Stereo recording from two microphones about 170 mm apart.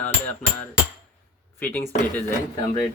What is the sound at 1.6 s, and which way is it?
Speech, 10° left (ahead or behind).